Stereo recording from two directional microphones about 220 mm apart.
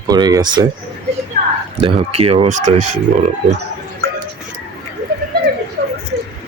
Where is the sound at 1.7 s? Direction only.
25° right (ahead or behind).